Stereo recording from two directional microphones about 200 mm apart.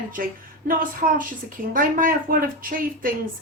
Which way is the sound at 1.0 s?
35° right (ahead or behind).